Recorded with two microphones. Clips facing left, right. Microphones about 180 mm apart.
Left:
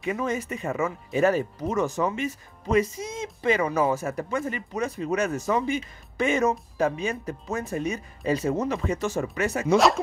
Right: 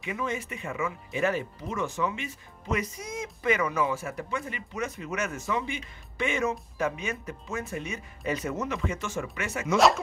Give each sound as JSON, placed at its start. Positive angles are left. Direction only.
{"t": 0.0, "sound": "speech", "side_deg": 40}
{"t": 2.8, "sound": "speech", "side_deg": 25}